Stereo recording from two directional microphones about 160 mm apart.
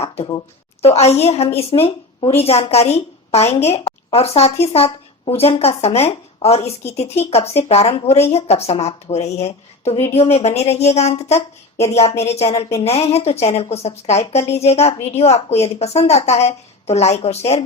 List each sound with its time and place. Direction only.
0.8 s a woman's voice: 40° left (ahead or behind)